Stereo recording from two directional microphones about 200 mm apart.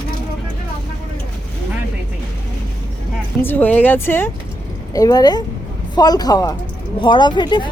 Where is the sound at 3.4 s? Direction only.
10° left (ahead or behind).